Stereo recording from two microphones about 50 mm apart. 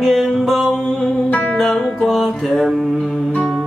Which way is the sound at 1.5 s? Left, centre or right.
Centre.